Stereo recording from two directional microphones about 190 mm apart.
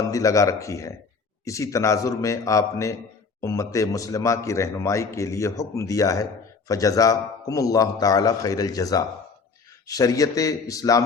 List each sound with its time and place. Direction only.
0.1 s a man's voice: 15° left (ahead or behind)